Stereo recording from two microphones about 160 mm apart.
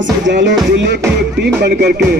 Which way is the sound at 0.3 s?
90° right.